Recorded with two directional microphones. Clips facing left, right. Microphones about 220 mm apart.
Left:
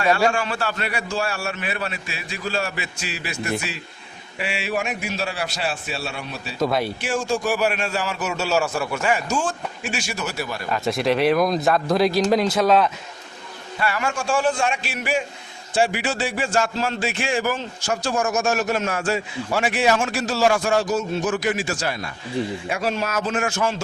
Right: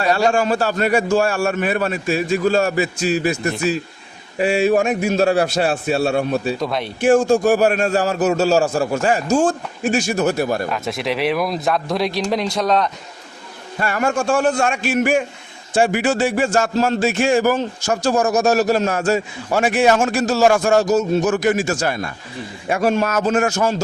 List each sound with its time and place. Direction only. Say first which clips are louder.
0.3 s speech: right 6 dB; 40° right (ahead or behind)
6.6 s speech: left 1 dB; 5° left (ahead or behind)
7.0 s a man's voice: right 10 dB; 55° right (ahead or behind); by 9.4 s 40° right (ahead or behind)
9.4 s speech: right 9 dB; 50° right (ahead or behind)
10.7 s speech: left 1 dB; centre (ahead or behind)
13.7 s speech: right 5 dB; 45° right (ahead or behind)
14.6 s speech: right 7 dB; 45° right (ahead or behind)